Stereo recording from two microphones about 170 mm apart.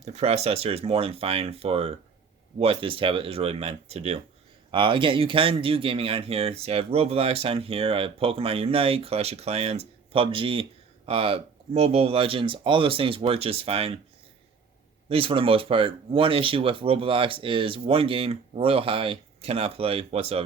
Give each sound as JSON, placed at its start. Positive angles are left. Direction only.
{"t": 0.0, "sound": "speech", "side_deg": -40}
{"t": 15.1, "sound": "speech", "side_deg": -35}